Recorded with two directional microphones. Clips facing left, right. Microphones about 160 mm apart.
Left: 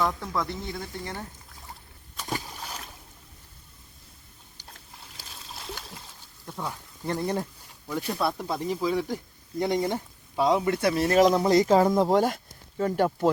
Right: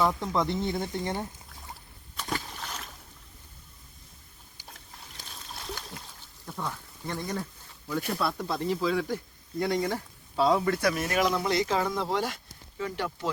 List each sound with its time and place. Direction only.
0.0 s speech: 10° right (ahead or behind)
0.3 s speech: 25° right (ahead or behind)
2.2 s boat: 15° left (ahead or behind)
4.6 s splash: centre (ahead or behind)
7.1 s speech: 30° left (ahead or behind)
8.2 s speech: 15° left (ahead or behind); by 13.3 s 45° left (ahead or behind)